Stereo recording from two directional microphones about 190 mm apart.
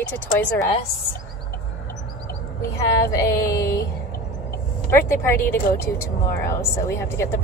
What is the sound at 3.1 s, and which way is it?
Speech, 15° left (ahead or behind).